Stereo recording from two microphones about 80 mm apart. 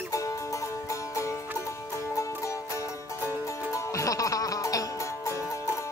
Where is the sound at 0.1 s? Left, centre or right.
Left.